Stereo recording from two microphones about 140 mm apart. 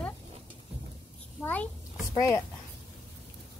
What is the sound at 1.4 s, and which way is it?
Speech, 10° left (ahead or behind).